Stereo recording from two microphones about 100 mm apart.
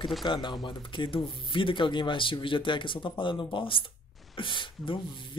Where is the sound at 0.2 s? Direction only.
50° left (ahead or behind).